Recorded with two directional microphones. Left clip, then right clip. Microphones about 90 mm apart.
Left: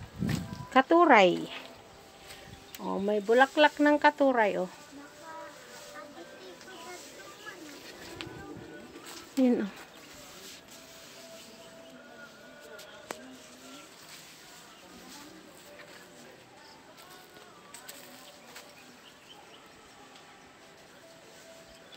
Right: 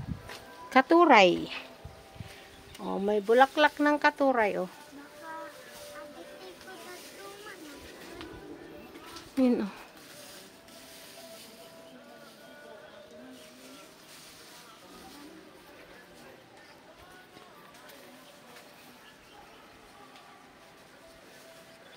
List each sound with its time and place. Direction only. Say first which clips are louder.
0.7 s speech: right 1 dB; 35° right (ahead or behind)
1.0 s speech: right 1 dB; 20° right (ahead or behind)
2.8 s speech: right 1 dB; 15° right (ahead or behind); by 4.6 s 5° left (ahead or behind)
9.4 s speech: even; 15° right (ahead or behind)